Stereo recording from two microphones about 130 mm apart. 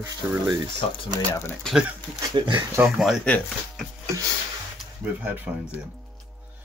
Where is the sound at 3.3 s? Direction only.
10° left (ahead or behind).